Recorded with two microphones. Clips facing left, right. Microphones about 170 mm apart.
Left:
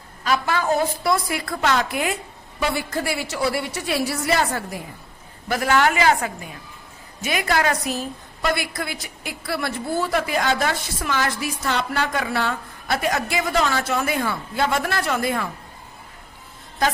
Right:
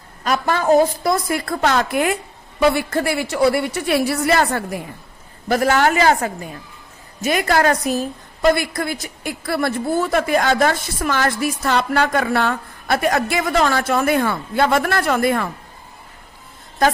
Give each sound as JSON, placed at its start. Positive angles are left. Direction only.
{"t": 0.3, "sound": "a woman's voice", "side_deg": -45}
{"t": 5.5, "sound": "a man's voice", "side_deg": -45}